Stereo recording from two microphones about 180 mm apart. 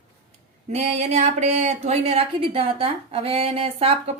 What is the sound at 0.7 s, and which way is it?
A woman's voice, 35° right (ahead or behind).